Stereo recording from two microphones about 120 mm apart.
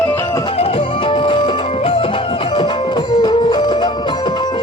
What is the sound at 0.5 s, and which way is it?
Music, 55° left (ahead or behind).